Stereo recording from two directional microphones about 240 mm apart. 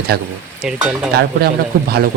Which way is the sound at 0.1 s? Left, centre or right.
Right.